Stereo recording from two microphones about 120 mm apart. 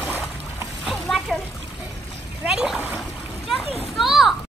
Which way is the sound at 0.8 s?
Centre (ahead or behind).